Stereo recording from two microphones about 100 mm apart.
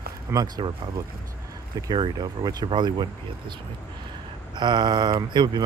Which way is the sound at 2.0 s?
50° right (ahead or behind).